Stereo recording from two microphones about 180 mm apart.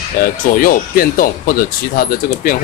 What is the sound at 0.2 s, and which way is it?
Speech, 50° left (ahead or behind).